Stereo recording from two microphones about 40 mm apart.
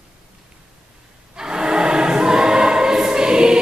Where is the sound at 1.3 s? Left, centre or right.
Centre.